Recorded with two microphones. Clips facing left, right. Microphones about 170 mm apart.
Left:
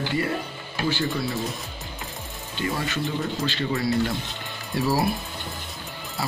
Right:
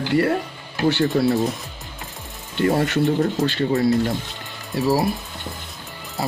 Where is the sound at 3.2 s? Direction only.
45° right (ahead or behind).